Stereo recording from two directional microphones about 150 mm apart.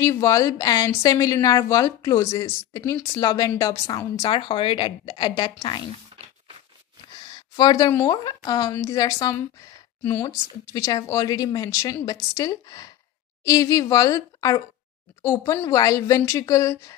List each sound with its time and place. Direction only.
0.0 s speech: 20° left (ahead or behind)
7.2 s speech: 30° left (ahead or behind)